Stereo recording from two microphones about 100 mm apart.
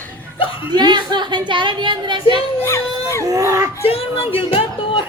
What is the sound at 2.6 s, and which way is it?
Speech, 25° left (ahead or behind).